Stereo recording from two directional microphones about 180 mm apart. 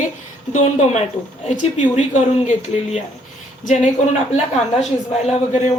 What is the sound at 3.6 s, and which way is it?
Speech, 45° left (ahead or behind).